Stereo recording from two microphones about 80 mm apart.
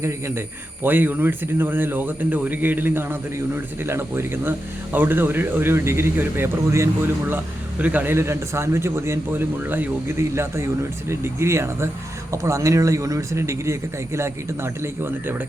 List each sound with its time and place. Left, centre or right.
0.0 s speech: right
8.1 s speech: right
9.6 s speech: right
11.1 s speech: right